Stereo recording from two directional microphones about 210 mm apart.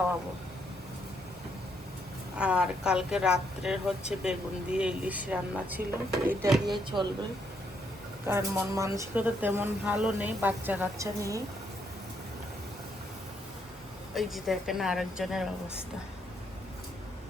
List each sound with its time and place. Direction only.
2.3 s speech: 5° right (ahead or behind)
6.9 s speech: 20° right (ahead or behind)
8.3 s speech: 15° right (ahead or behind)
14.1 s speech: centre (ahead or behind)